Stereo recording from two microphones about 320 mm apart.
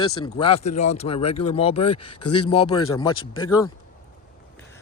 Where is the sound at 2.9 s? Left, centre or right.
Centre.